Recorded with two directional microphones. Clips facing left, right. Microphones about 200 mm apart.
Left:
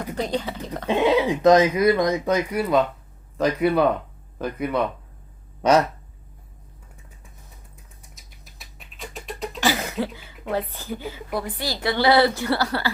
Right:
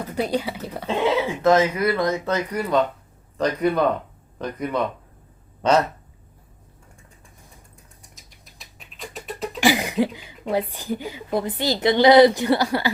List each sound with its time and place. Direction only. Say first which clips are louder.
0.2 s speech: right 3 dB; 10° right (ahead or behind)
0.9 s speech: left 3 dB; 15° left (ahead or behind)
8.1 s rodents: even; centre (ahead or behind)
9.6 s speech: right 5 dB; 15° right (ahead or behind)